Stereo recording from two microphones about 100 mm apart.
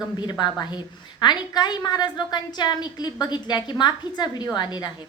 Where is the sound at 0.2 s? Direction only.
45° left (ahead or behind).